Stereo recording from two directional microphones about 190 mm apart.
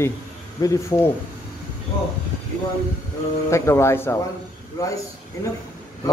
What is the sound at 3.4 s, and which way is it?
Speech, 15° left (ahead or behind).